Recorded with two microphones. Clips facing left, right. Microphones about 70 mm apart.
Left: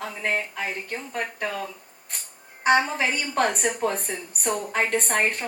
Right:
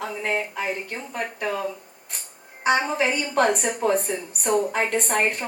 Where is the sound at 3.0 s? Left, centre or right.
Right.